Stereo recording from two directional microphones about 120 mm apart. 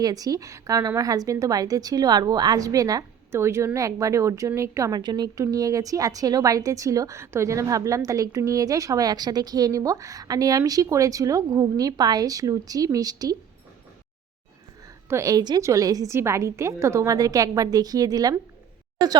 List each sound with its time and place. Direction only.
0.0 s a woman's voice: 30° right (ahead or behind)
15.1 s speech: 30° right (ahead or behind)